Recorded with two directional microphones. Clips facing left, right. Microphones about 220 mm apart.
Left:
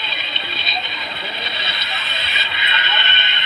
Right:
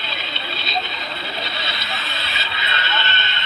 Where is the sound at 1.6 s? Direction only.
20° left (ahead or behind).